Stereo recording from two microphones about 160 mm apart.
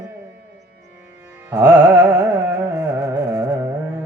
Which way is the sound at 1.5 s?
15° right (ahead or behind).